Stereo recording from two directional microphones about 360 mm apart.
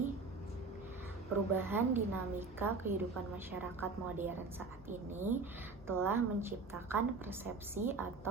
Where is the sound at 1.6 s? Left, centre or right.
Centre.